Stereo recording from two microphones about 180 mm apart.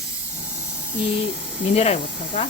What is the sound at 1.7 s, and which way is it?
Speech, 35° left (ahead or behind).